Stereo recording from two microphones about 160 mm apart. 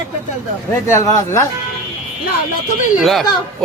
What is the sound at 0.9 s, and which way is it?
Speech, 20° left (ahead or behind).